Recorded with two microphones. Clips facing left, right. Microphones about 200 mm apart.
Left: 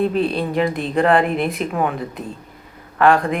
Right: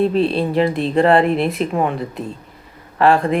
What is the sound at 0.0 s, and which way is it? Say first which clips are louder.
Speech: right 3 dB; 30° right (ahead or behind).